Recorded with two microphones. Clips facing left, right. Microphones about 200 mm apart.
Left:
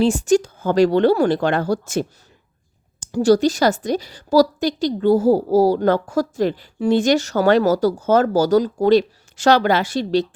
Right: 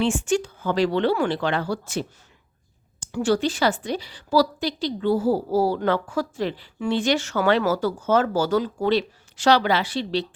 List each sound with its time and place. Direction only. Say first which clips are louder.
0.0 s a woman's voice: left 6 dB; 40° left (ahead or behind)